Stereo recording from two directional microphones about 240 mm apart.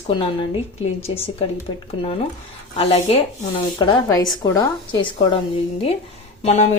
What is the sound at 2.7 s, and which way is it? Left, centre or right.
Speech, left.